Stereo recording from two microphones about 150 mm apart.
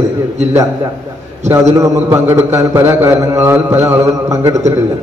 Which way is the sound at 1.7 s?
20° right (ahead or behind).